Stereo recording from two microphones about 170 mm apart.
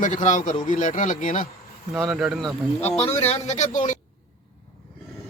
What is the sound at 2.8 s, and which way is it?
A man's voice, 40° left (ahead or behind).